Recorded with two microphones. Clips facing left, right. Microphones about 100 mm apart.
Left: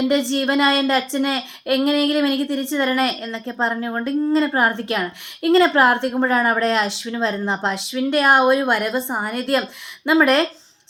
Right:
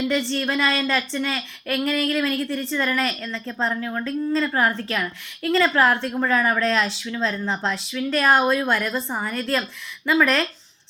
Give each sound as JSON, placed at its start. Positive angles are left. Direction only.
{"t": 0.0, "sound": "a woman's voice", "side_deg": 25}